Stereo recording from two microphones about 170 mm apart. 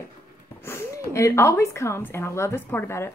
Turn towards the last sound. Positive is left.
turn(degrees=15)  # may be behind; listen again after turning